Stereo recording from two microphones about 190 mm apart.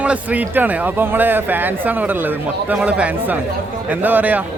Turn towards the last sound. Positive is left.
turn(degrees=-10)  # may be behind; listen again after turning